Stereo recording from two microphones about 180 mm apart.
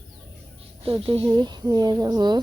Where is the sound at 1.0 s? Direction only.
25° right (ahead or behind).